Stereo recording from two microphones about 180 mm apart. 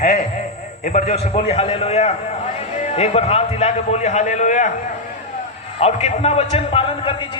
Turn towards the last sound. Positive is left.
turn(degrees=25)  # may be behind; listen again after turning